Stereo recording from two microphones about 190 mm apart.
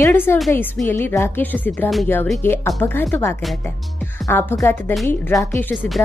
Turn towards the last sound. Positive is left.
turn(degrees=5)  # may be behind; listen again after turning